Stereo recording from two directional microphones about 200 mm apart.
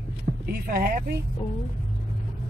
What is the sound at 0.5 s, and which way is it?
Speech, 45° right (ahead or behind).